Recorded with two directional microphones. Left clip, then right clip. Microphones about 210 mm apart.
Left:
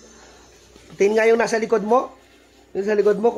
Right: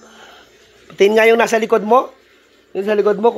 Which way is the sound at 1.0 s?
30° right (ahead or behind).